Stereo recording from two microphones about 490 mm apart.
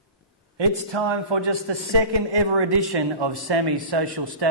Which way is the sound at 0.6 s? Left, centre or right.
Right.